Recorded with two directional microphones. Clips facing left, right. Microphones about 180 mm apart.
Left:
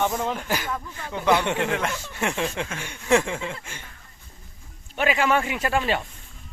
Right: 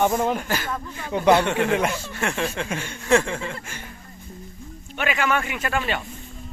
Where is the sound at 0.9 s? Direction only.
15° right (ahead or behind).